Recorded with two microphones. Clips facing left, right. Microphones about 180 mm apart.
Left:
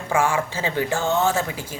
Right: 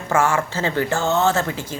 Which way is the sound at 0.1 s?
10° left (ahead or behind).